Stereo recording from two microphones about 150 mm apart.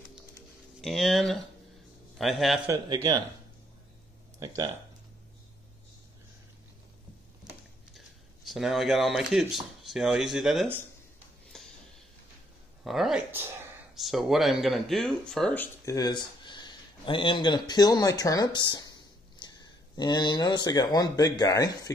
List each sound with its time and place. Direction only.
0.7 s speech: centre (ahead or behind)
2.9 s speech: 25° right (ahead or behind)
4.4 s speech: 25° right (ahead or behind)
7.4 s a sound: 30° right (ahead or behind)
8.5 s speech: centre (ahead or behind)
11.5 s a sound: 5° left (ahead or behind)
12.8 s speech: centre (ahead or behind); by 21.9 s 25° left (ahead or behind)